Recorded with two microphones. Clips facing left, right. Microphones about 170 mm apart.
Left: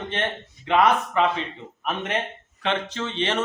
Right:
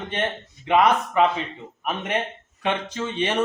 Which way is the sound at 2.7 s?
10° right (ahead or behind).